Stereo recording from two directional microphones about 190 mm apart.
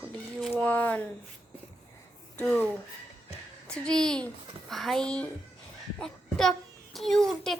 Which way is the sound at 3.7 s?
5° left (ahead or behind).